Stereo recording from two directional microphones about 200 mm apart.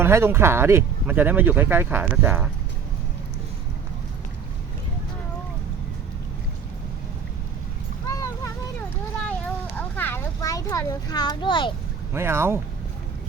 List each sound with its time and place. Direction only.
0.0 s speech: 15° right (ahead or behind)
8.0 s vehicle: 15° left (ahead or behind)
9.7 s a sound: 10° left (ahead or behind)
12.1 s speech: 10° right (ahead or behind)